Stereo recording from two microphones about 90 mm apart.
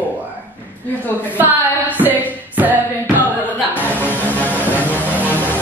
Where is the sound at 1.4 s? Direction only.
20° right (ahead or behind).